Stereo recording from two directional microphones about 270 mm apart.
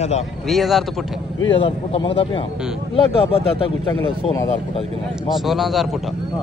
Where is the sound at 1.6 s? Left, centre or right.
Centre.